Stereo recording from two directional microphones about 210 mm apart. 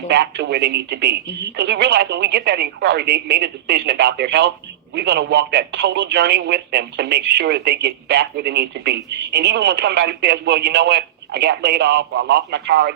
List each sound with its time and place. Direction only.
0.1 s speech: 55° right (ahead or behind)